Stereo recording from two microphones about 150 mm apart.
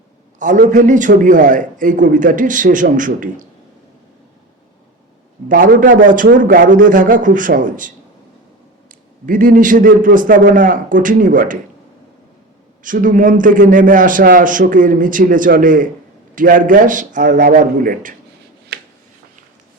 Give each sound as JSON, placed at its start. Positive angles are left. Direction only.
{"t": 0.3, "sound": "a man's voice", "side_deg": -60}
{"t": 5.5, "sound": "a man's voice", "side_deg": -65}
{"t": 9.2, "sound": "a man's voice", "side_deg": -65}
{"t": 12.8, "sound": "a man's voice", "side_deg": -60}
{"t": 18.7, "sound": "a sound", "side_deg": -90}